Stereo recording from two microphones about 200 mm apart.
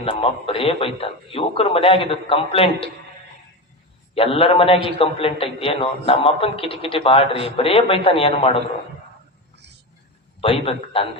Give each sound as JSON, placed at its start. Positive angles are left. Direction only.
{"t": 0.0, "sound": "a man's voice", "side_deg": 30}
{"t": 4.1, "sound": "a man's voice", "side_deg": 30}
{"t": 10.4, "sound": "a man's voice", "side_deg": 25}